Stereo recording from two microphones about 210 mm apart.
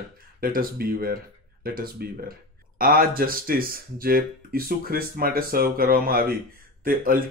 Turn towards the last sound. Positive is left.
turn(degrees=-45)  # may be behind; listen again after turning